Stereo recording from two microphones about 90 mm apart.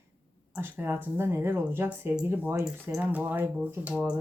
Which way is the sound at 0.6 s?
20° right (ahead or behind).